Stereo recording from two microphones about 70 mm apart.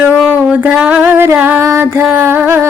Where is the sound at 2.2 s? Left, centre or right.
Right.